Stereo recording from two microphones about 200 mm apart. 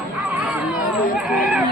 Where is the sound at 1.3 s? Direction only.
5° right (ahead or behind).